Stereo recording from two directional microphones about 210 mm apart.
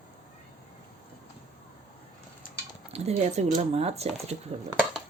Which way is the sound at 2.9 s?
30° right (ahead or behind).